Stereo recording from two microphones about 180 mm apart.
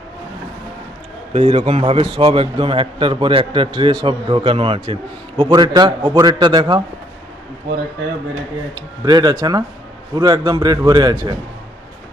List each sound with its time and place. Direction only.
1.3 s a man's voice: 35° right (ahead or behind)
8.7 s a man's voice: 20° right (ahead or behind)